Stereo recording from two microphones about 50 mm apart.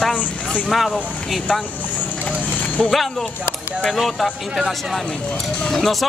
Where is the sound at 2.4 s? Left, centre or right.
Left.